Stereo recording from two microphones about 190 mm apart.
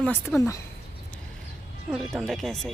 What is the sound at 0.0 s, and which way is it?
Speech, 10° left (ahead or behind).